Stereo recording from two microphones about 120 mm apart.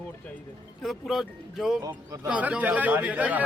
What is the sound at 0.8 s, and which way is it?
A man's voice, centre (ahead or behind).